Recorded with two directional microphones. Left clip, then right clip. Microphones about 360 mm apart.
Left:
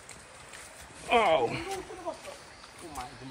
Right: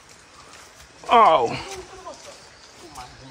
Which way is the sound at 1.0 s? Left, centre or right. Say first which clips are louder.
Right 10 dB; centre.